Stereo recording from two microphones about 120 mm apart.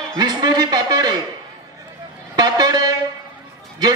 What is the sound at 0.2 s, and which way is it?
Speech, 35° right (ahead or behind).